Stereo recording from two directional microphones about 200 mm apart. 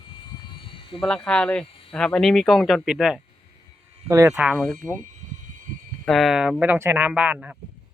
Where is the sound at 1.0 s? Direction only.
5° left (ahead or behind).